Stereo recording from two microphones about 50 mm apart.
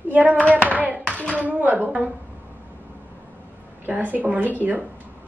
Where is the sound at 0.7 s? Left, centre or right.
Right.